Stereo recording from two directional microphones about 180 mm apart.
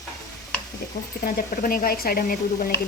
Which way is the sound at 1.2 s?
55° left (ahead or behind).